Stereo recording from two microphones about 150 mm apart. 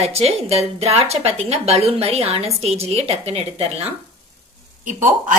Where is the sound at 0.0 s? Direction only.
45° right (ahead or behind).